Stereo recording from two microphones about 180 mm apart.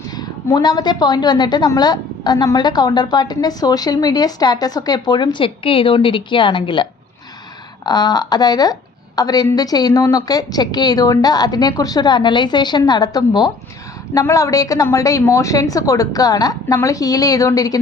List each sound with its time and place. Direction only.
0.2 s a woman's voice: 20° left (ahead or behind)
7.9 s a woman's voice: 20° left (ahead or behind)